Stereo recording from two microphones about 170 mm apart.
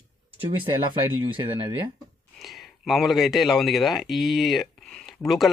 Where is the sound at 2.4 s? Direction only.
Centre (ahead or behind).